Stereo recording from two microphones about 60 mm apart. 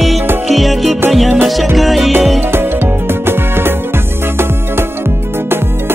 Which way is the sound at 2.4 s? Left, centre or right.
Right.